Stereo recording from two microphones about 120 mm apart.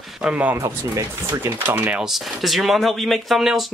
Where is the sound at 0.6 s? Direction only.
20° right (ahead or behind).